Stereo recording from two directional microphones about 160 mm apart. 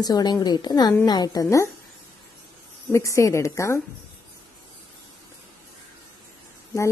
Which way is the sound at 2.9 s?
20° left (ahead or behind).